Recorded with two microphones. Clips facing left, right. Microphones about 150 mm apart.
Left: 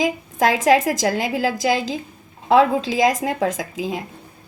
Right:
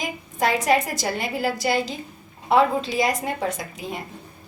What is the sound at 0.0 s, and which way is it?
A woman's voice, 90° left.